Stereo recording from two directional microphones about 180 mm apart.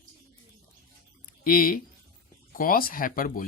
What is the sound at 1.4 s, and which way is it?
Speech, 50° left (ahead or behind).